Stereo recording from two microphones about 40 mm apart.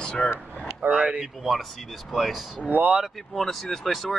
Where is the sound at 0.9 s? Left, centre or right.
Right.